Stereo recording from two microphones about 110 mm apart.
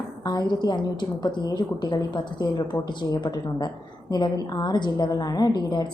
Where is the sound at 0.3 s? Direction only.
40° left (ahead or behind).